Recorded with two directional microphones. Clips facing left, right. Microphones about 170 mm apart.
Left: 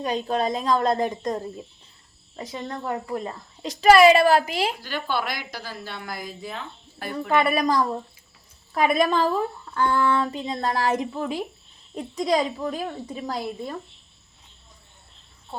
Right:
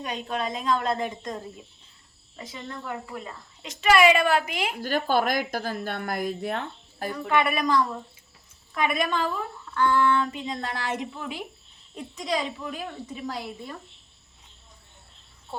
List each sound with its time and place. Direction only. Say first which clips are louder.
0.0 s speech: left 6 dB; 35° left (ahead or behind)
4.8 s speech: right 4 dB; 45° right (ahead or behind); by 6.7 s 60° right (ahead or behind)
7.1 s speech: left 3 dB; 35° left (ahead or behind)